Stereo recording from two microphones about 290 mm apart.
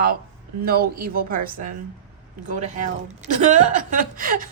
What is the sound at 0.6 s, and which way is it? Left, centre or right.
A woman's voice, right.